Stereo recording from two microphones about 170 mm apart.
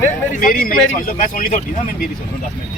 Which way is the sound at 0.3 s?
50° left (ahead or behind).